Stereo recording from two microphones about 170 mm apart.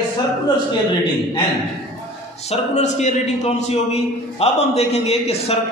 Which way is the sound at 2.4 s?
40° left (ahead or behind).